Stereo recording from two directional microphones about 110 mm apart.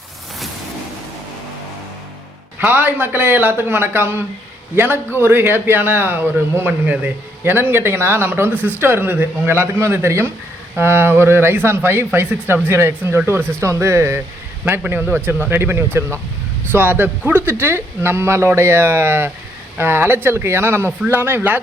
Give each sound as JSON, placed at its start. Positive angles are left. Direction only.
{"t": 2.6, "sound": "a man's voice", "side_deg": -15}